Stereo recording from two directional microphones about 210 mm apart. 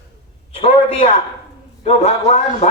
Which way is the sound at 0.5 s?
25° left (ahead or behind).